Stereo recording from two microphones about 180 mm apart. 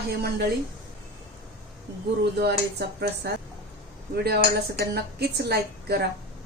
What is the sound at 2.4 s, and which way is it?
A woman's voice, 65° right (ahead or behind).